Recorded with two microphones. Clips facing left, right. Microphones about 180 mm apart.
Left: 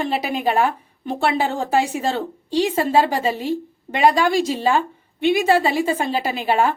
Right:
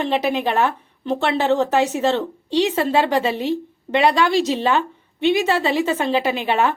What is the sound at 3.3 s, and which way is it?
Speech, 10° left (ahead or behind).